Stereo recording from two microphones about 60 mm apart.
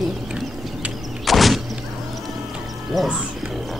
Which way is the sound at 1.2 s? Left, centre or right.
Centre.